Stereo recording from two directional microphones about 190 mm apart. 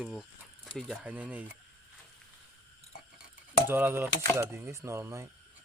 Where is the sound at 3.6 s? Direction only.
10° right (ahead or behind).